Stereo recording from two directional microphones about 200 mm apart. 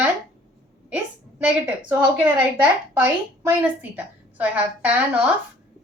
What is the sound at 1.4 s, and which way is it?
A woman's voice, 10° right (ahead or behind).